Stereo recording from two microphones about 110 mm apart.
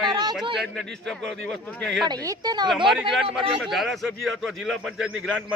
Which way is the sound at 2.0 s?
35° right (ahead or behind).